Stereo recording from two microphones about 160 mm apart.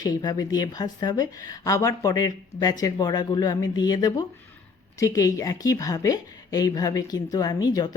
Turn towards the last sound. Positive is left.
turn(degrees=25)  # may be behind; listen again after turning